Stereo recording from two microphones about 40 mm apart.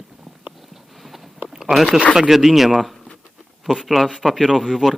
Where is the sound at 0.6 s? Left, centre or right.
Centre.